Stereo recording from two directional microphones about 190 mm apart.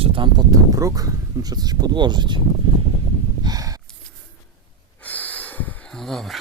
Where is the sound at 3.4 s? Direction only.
20° right (ahead or behind).